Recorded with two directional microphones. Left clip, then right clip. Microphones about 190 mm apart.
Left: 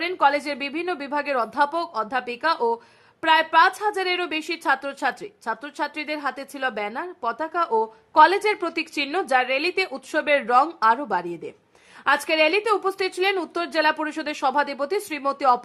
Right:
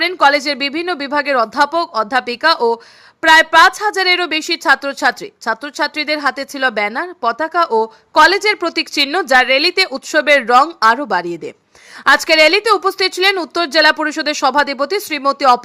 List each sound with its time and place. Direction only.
0.0 s a woman's voice: 20° right (ahead or behind)